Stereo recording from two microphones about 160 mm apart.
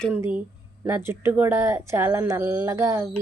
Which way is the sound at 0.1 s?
10° right (ahead or behind).